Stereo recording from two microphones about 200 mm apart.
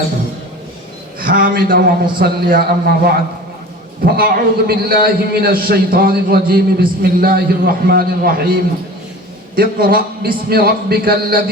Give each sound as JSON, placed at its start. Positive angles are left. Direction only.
{"t": 1.2, "sound": "a man's voice", "side_deg": -45}
{"t": 9.6, "sound": "a man's voice", "side_deg": -45}